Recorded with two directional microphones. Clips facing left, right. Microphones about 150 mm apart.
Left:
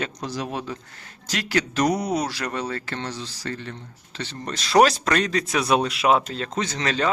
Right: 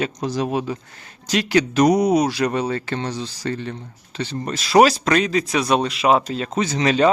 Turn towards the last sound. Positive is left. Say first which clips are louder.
# right 7 dB
turn(degrees=-15)  # may be behind; listen again after turning